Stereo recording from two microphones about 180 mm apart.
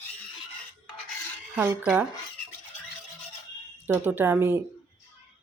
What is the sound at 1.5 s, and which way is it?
Speech, 10° right (ahead or behind).